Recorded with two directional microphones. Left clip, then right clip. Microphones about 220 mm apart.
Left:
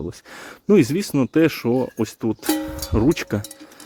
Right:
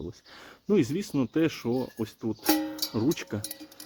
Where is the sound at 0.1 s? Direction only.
45° left (ahead or behind).